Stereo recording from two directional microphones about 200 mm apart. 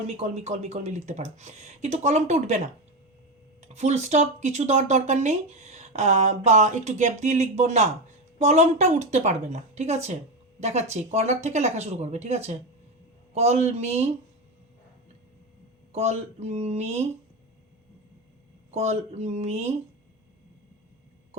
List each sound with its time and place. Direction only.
0.1 s speech: 35° right (ahead or behind)
3.7 s speech: 35° right (ahead or behind)
15.9 s speech: 35° right (ahead or behind)
18.7 s speech: 35° right (ahead or behind)